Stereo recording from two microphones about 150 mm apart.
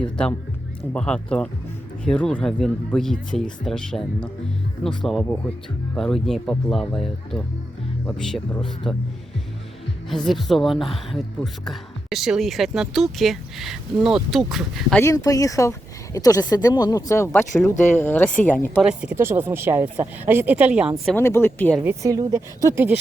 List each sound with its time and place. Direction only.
0.0 s speech: 5° left (ahead or behind)
10.1 s speech: centre (ahead or behind)
15.0 s speech: 20° left (ahead or behind)
18.8 s speech: 5° right (ahead or behind)
19.1 s speech: 15° right (ahead or behind); by 21.2 s centre (ahead or behind)
21.2 s speech: 15° left (ahead or behind)
21.8 s speech: 20° right (ahead or behind)